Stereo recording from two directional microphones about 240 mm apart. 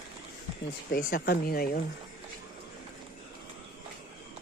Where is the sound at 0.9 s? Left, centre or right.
Left.